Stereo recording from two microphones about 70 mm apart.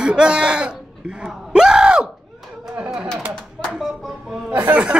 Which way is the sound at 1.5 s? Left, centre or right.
Centre.